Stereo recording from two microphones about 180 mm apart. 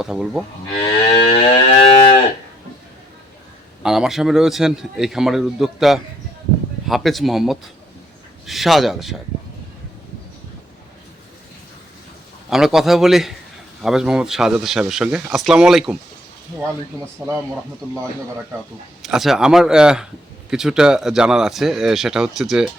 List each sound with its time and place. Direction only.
0.0 s a man's voice: 5° right (ahead or behind)
0.8 s livestock: 30° left (ahead or behind)
3.8 s a man's voice: 5° right (ahead or behind)
12.5 s a man's voice: centre (ahead or behind)
16.6 s speech: 15° right (ahead or behind)
19.0 s a man's voice: centre (ahead or behind)